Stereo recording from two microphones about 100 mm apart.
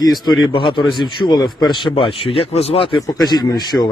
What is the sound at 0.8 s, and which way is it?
Speech, centre (ahead or behind).